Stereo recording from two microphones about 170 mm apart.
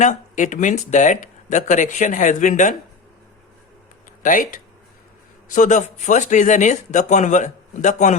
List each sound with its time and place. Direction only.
0.0 s speech: 45° left (ahead or behind)
4.2 s speech: 55° left (ahead or behind)